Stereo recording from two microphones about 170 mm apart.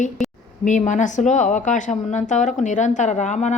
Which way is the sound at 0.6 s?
45° left (ahead or behind).